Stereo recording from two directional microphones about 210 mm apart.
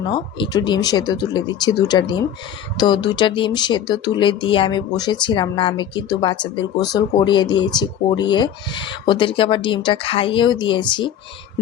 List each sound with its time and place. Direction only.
0.1 s speech: 20° left (ahead or behind)